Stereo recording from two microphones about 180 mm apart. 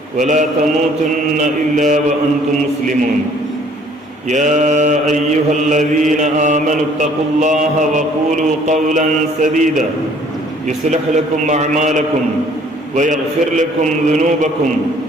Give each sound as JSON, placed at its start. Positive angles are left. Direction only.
{"t": 0.2, "sound": "mantra", "side_deg": -45}
{"t": 4.3, "sound": "mantra", "side_deg": -45}
{"t": 10.7, "sound": "a man's voice", "side_deg": -40}
{"t": 13.6, "sound": "mantra", "side_deg": -45}